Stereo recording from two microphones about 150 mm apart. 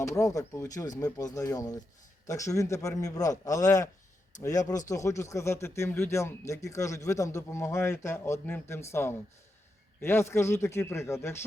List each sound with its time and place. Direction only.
0.0 s a man's voice: 20° left (ahead or behind)